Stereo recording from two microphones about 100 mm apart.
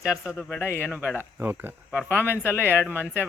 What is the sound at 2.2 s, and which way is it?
Speech, 20° left (ahead or behind).